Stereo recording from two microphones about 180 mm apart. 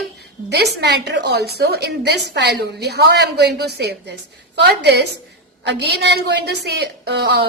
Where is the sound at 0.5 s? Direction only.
65° right (ahead or behind).